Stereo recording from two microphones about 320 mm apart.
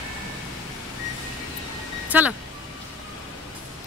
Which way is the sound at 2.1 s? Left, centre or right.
Centre.